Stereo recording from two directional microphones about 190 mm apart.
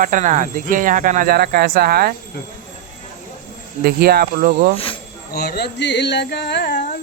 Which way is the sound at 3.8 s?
55° right (ahead or behind).